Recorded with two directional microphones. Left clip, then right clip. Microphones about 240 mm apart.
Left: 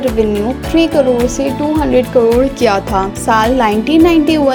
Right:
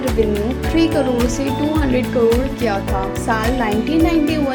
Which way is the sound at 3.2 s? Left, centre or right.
Left.